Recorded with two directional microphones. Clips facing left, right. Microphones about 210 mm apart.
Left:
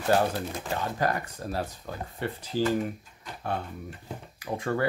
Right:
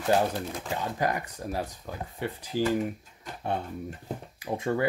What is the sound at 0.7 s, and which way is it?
Speech, 15° right (ahead or behind).